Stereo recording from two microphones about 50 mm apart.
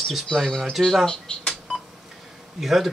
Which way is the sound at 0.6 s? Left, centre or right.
Centre.